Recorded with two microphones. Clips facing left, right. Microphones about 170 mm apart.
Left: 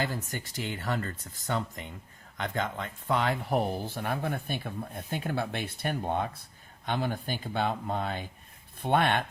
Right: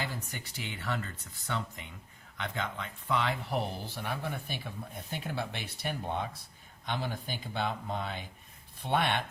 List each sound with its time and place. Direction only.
0.0 s speech: 45° left (ahead or behind)